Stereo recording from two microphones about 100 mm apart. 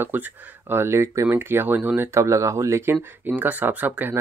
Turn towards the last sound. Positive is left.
turn(degrees=-15)  # may be behind; listen again after turning